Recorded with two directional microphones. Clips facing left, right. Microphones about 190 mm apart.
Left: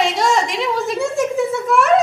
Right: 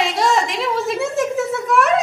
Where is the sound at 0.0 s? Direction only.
Centre (ahead or behind).